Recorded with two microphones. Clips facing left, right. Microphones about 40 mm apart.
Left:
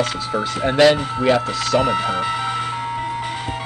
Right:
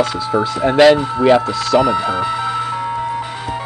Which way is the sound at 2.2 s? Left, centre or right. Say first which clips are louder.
Right 3 dB; left.